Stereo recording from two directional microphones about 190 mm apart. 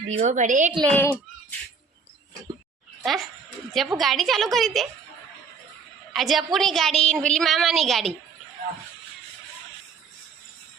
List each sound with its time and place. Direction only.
0.1 s a woman's voice: 35° right (ahead or behind)
0.9 s a child's voice: 10° left (ahead or behind)
3.0 s a woman's voice: centre (ahead or behind)
6.1 s a woman's voice: centre (ahead or behind)